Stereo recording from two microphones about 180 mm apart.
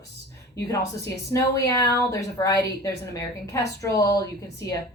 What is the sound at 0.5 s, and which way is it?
Speech, 15° left (ahead or behind).